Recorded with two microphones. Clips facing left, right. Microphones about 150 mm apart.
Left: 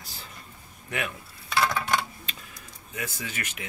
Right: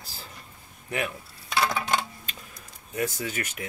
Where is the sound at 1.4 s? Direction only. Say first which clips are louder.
Even; 20° right (ahead or behind).